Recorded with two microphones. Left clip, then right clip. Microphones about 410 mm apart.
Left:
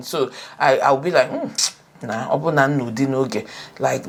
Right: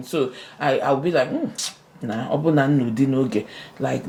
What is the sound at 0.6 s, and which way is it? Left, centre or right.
Speech, left.